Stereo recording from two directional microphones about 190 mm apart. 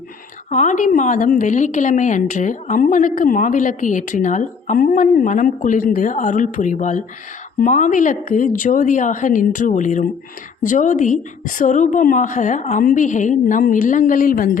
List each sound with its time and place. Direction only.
0.5 s a woman's voice: 40° left (ahead or behind)